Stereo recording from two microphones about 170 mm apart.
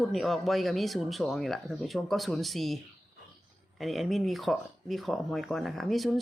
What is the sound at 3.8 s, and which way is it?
Speech, centre (ahead or behind).